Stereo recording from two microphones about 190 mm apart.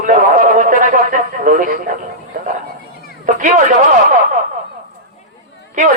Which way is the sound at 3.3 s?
40° right (ahead or behind).